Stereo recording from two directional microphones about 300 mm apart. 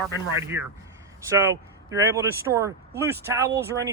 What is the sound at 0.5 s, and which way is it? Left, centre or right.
Speech, centre.